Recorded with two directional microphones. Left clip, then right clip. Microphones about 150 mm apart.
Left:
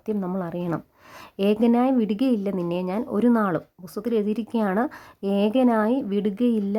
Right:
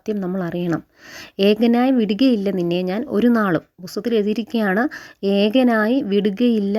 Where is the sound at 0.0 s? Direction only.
20° right (ahead or behind).